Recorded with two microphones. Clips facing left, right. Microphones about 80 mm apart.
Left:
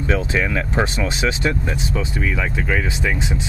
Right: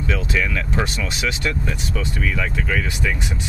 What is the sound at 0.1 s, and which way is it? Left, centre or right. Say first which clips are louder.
Speech: left 3 dB; left.